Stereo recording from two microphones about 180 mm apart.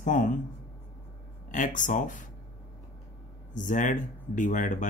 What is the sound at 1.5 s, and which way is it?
Speech, 45° left (ahead or behind).